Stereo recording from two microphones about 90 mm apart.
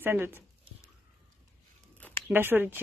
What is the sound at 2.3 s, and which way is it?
Speech, 25° right (ahead or behind).